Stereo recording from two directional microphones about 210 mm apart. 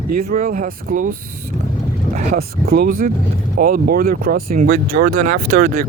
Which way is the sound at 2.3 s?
45° right (ahead or behind).